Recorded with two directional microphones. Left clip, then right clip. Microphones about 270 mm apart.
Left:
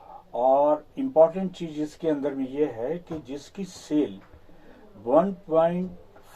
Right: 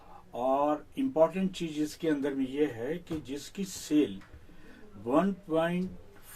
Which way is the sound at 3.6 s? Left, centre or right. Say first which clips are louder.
Left 2 dB; centre.